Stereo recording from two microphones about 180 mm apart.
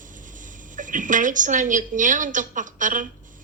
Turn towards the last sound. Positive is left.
turn(degrees=-45)  # may be behind; listen again after turning